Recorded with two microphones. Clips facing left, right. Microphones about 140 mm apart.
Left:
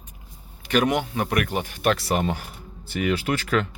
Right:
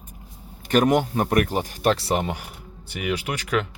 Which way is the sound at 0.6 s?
45° right (ahead or behind).